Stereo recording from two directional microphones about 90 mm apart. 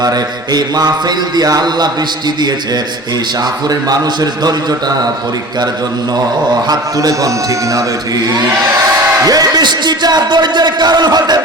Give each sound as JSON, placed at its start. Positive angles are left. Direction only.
{"t": 0.5, "sound": "speech", "side_deg": -50}
{"t": 3.7, "sound": "speech", "side_deg": -45}
{"t": 6.7, "sound": "a man's voice", "side_deg": -40}
{"t": 9.2, "sound": "speech", "side_deg": -45}